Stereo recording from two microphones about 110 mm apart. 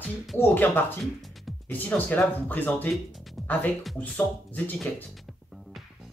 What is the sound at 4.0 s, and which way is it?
Speech, 15° left (ahead or behind).